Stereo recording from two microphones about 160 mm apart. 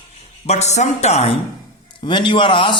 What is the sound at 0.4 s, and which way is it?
Speech, 45° left (ahead or behind).